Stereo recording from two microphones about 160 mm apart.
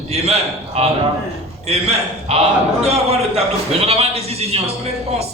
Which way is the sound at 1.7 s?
40° right (ahead or behind).